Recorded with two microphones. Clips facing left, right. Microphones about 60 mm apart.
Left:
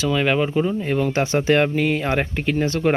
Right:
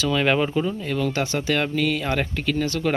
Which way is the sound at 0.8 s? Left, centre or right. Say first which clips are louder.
Left 4 dB; left.